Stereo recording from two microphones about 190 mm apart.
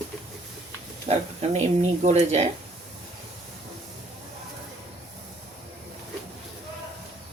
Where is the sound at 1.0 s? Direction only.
35° right (ahead or behind).